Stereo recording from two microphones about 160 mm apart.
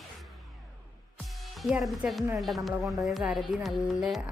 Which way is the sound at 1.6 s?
Centre (ahead or behind).